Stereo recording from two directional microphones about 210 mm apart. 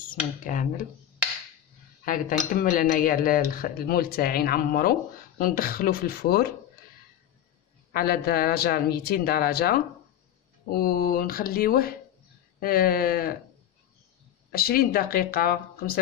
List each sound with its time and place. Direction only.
0.1 s speech: 40° left (ahead or behind)
2.5 s speech: 40° left (ahead or behind)
7.9 s speech: 45° left (ahead or behind)
14.5 s speech: 45° left (ahead or behind)